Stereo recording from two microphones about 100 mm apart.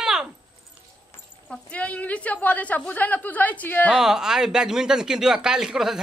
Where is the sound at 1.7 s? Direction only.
15° left (ahead or behind).